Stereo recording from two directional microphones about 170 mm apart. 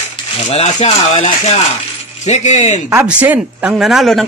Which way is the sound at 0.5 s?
40° left (ahead or behind).